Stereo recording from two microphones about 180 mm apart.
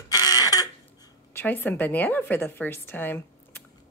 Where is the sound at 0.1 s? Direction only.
20° left (ahead or behind).